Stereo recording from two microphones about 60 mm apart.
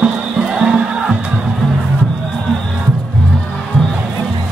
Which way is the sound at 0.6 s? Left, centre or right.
Centre.